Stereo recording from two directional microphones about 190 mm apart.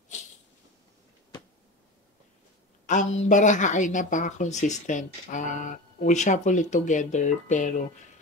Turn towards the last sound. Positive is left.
turn(degrees=40)  # may be behind; listen again after turning